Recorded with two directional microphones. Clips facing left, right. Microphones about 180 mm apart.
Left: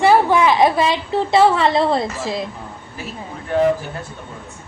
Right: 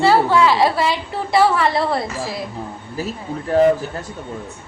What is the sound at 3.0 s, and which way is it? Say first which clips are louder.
Speech: right 6 dB; 40° right (ahead or behind).